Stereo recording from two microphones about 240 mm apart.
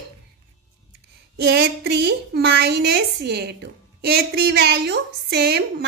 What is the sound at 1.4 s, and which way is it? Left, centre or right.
A woman's voice, right.